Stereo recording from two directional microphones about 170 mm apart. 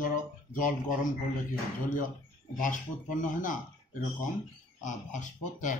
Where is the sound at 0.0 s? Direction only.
50° left (ahead or behind).